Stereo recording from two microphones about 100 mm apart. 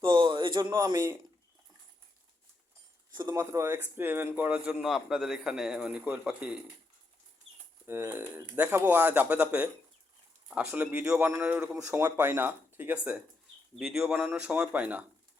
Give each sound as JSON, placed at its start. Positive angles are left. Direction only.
{"t": 0.0, "sound": "a sound", "side_deg": -55}
{"t": 0.9, "sound": "speech", "side_deg": -25}
{"t": 3.1, "sound": "speech", "side_deg": -45}
{"t": 3.3, "sound": "speech", "side_deg": -30}
{"t": 7.9, "sound": "speech", "side_deg": -25}
{"t": 11.8, "sound": "speech", "side_deg": -30}
{"t": 13.7, "sound": "speech", "side_deg": -5}